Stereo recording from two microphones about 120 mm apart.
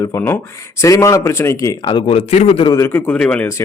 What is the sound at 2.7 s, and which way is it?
Speech, 20° left (ahead or behind).